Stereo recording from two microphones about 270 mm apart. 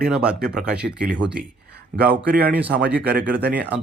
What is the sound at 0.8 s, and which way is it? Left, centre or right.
Speech, right.